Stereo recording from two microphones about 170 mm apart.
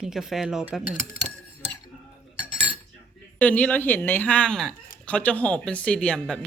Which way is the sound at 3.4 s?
10° left (ahead or behind).